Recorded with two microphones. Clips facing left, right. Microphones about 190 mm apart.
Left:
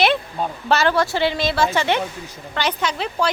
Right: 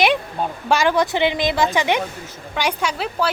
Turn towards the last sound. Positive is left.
turn(degrees=-5)  # may be behind; listen again after turning